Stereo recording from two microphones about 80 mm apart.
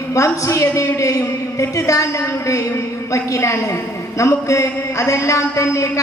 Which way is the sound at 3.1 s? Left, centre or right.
Left.